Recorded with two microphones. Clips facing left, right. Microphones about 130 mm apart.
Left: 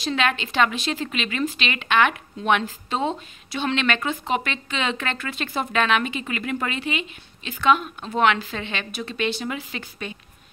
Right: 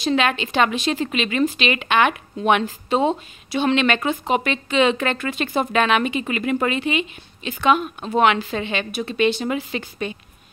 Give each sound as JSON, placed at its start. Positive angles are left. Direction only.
{"t": 0.0, "sound": "a woman's voice", "side_deg": -20}